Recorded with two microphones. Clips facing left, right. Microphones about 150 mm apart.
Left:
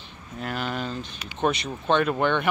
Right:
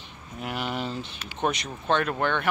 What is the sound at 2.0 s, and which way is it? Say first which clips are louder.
Speech: left 3 dB; 10° left (ahead or behind).